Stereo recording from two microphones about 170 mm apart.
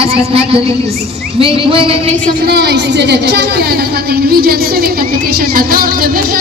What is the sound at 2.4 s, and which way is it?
A woman's voice, 75° right (ahead or behind).